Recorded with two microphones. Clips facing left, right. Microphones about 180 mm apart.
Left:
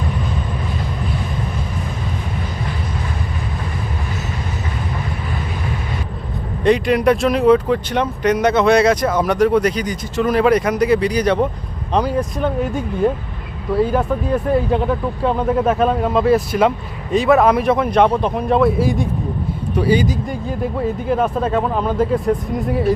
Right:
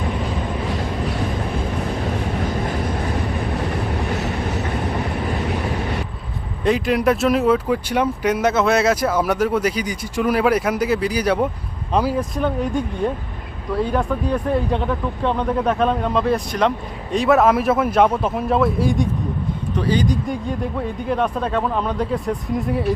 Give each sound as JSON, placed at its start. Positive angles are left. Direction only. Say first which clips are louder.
{"t": 0.7, "sound": "vehicle", "louder": "right 1 dB", "side_deg": -75}
{"t": 6.7, "sound": "speech", "louder": "left 3 dB", "side_deg": 0}